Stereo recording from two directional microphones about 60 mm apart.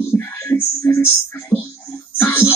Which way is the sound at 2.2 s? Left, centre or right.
Left.